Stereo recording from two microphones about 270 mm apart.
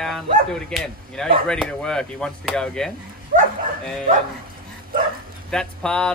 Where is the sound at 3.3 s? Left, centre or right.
Right.